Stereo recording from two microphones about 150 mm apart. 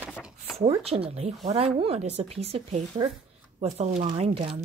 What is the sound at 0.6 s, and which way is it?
Speech, 40° right (ahead or behind).